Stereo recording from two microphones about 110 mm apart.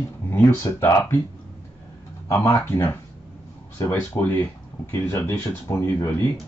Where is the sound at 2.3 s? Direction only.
20° left (ahead or behind).